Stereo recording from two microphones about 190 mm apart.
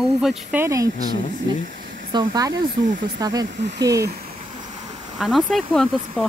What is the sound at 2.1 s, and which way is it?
Speech, 20° right (ahead or behind).